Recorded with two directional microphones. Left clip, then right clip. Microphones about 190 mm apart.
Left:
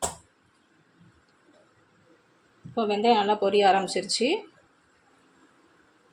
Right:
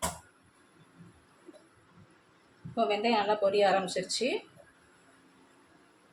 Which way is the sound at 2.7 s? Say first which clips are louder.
Left 5 dB; 35° left (ahead or behind).